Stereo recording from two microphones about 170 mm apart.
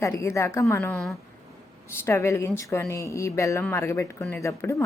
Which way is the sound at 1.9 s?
15° left (ahead or behind).